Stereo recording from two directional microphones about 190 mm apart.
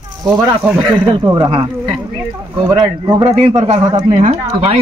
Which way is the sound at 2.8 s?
30° right (ahead or behind).